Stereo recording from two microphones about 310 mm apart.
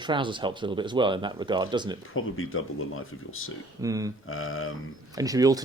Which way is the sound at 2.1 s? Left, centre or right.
Left.